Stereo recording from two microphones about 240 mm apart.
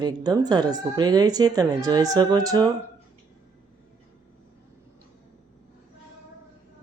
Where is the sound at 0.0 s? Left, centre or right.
Centre.